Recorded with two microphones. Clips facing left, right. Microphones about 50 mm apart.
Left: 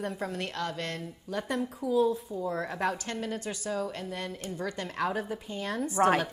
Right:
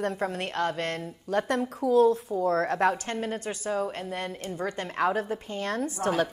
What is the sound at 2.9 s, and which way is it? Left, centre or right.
Speech, right.